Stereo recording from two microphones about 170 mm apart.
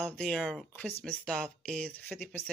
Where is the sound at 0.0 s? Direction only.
5° left (ahead or behind).